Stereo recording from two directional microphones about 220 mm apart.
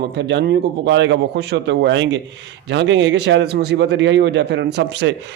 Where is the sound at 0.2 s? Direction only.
50° right (ahead or behind).